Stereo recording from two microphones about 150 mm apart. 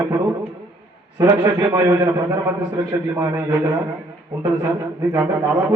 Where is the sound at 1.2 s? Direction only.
20° right (ahead or behind).